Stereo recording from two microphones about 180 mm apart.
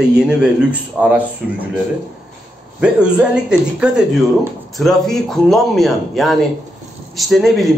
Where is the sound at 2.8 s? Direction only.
5° right (ahead or behind).